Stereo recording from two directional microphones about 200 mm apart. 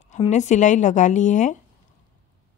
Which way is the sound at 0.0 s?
35° left (ahead or behind).